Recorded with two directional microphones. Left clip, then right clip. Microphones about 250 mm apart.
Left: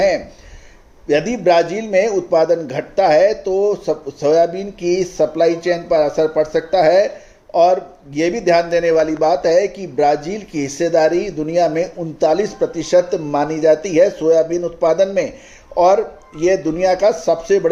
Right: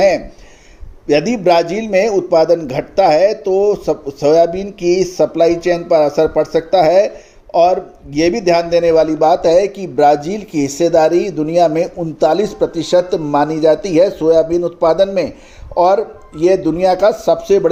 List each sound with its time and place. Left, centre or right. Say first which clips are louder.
1.0 s a man's voice: right 2 dB; right